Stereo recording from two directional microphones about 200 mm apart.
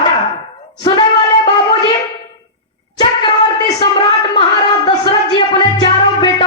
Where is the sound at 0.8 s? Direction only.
20° left (ahead or behind).